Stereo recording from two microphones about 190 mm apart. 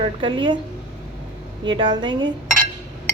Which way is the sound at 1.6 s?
25° right (ahead or behind).